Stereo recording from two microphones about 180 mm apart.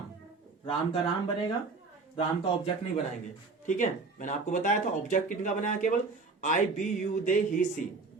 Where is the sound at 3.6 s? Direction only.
45° left (ahead or behind).